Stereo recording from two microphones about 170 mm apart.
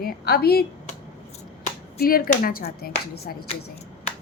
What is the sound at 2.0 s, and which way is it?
A woman's voice, 60° left (ahead or behind).